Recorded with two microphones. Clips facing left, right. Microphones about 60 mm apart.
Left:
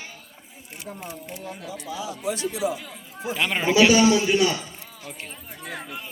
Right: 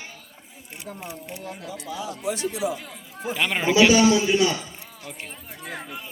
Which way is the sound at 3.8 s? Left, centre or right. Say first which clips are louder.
Even; centre.